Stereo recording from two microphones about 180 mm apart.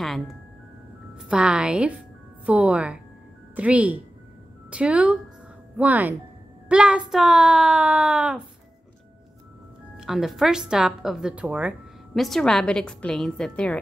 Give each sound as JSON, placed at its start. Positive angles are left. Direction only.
{"t": 0.0, "sound": "a woman's voice", "side_deg": 0}
{"t": 9.9, "sound": "a woman's voice", "side_deg": 0}